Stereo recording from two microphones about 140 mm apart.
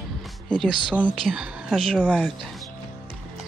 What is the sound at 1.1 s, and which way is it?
Speech, centre (ahead or behind).